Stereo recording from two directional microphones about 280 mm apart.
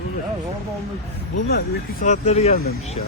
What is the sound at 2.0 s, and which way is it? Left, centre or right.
Speech, left.